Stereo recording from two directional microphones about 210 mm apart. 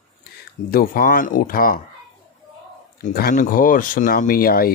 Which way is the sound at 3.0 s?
45° left (ahead or behind).